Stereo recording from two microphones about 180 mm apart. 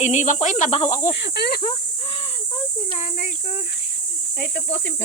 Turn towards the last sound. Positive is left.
turn(degrees=60)  # may be behind; listen again after turning